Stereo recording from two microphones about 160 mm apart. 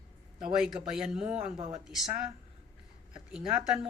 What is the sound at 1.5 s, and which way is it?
Speech, 30° right (ahead or behind).